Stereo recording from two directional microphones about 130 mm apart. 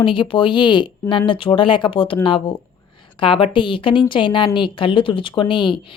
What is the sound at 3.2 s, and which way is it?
Speech, 40° left (ahead or behind).